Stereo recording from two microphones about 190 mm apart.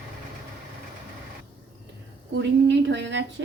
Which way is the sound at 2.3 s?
70° right (ahead or behind).